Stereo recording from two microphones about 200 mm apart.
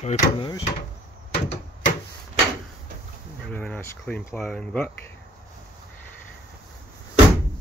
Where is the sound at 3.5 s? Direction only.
10° left (ahead or behind).